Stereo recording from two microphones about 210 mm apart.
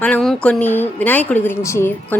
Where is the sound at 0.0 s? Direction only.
5° left (ahead or behind).